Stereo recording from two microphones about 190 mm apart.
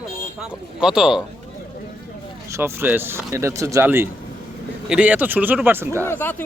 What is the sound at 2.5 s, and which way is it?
Speech, 15° right (ahead or behind).